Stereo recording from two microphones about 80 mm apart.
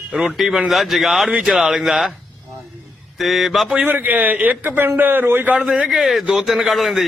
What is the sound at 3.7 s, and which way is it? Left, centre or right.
A man's voice, centre.